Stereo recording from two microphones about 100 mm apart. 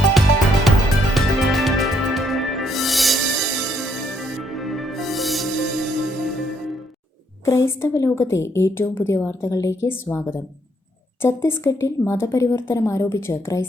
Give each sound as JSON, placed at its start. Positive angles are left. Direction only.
{"t": 0.7, "sound": "music", "side_deg": 0}
{"t": 7.4, "sound": "a woman's voice", "side_deg": 30}